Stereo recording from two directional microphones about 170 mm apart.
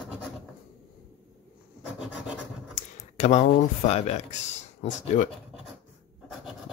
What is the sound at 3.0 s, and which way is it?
Speech, 45° left (ahead or behind).